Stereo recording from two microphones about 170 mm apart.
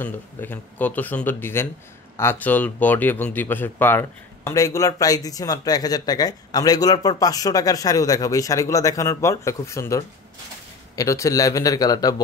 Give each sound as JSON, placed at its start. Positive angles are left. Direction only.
{"t": 0.0, "sound": "speech", "side_deg": 10}